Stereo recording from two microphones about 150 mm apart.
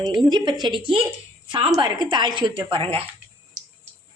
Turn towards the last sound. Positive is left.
turn(degrees=-40)  # may be behind; listen again after turning